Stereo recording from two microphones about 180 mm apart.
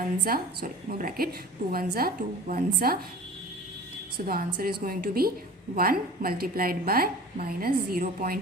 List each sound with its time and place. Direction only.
0.3 s a woman's voice: 55° right (ahead or behind)
4.3 s a woman's voice: 55° right (ahead or behind)